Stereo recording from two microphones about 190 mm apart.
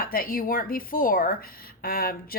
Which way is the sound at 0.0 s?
50° left (ahead or behind).